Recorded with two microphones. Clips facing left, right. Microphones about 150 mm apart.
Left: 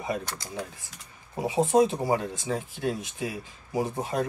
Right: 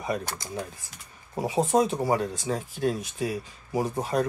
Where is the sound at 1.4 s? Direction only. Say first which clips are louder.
Left 1 dB; 20° left (ahead or behind).